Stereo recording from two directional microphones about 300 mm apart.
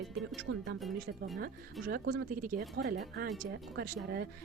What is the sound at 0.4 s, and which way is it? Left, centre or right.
Speech, right.